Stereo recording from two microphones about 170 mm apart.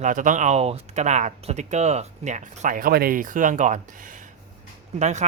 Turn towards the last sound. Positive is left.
turn(degrees=-45)  # may be behind; listen again after turning